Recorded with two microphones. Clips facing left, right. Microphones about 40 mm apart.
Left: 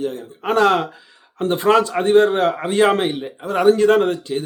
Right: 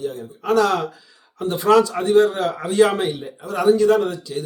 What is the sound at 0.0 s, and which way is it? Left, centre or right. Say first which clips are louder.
Speech: left 2 dB; left.